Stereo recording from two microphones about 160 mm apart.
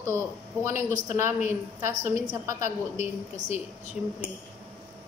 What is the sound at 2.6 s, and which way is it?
A woman's voice, 45° left (ahead or behind).